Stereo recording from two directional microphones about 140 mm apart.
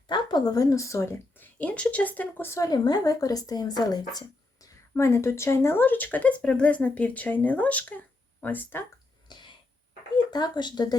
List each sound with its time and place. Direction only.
0.1 s a woman's voice: 30° left (ahead or behind)
4.6 s speech: 20° left (ahead or behind)
9.3 s a sound: 35° left (ahead or behind)
10.3 s speech: 30° left (ahead or behind)